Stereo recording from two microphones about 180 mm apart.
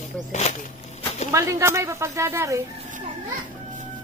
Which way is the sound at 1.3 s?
15° right (ahead or behind).